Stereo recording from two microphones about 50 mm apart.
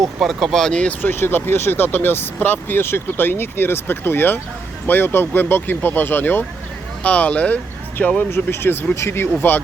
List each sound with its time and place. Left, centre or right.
0.2 s speech: centre
0.6 s speech: centre
1.1 s speech: left
7.0 s speech: left
8.3 s speech: left